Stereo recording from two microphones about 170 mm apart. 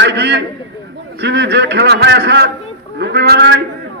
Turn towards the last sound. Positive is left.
turn(degrees=-80)